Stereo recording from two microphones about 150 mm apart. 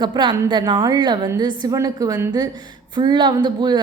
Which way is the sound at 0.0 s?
30° right (ahead or behind).